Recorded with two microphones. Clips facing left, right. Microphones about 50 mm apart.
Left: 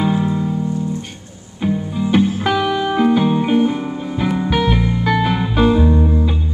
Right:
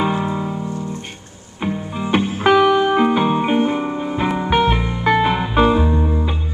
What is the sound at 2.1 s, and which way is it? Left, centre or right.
Music, right.